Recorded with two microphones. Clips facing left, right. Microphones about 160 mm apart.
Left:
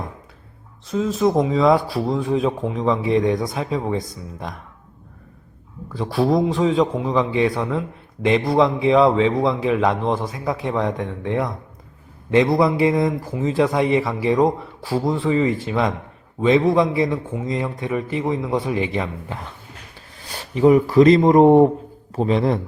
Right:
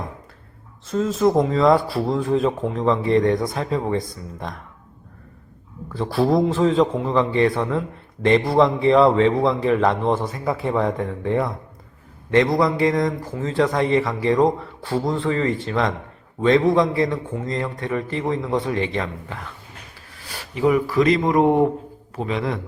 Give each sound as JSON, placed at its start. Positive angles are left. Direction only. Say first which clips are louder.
{"t": 0.9, "sound": "a man's voice", "louder": "even", "side_deg": 0}
{"t": 5.9, "sound": "a man's voice", "louder": "even", "side_deg": 0}
{"t": 12.3, "sound": "a man's voice", "louder": "left 1 dB", "side_deg": 10}
{"t": 20.1, "sound": "a sound", "louder": "left 4 dB", "side_deg": 20}
{"t": 20.7, "sound": "a man's voice", "louder": "left 5 dB", "side_deg": 30}